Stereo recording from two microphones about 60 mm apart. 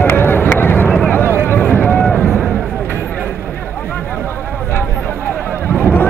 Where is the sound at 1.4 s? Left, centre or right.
Left.